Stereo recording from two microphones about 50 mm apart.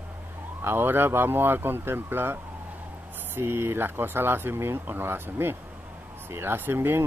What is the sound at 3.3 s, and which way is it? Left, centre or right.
Speech, right.